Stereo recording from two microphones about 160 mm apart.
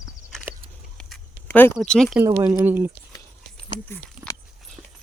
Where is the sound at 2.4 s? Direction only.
10° right (ahead or behind).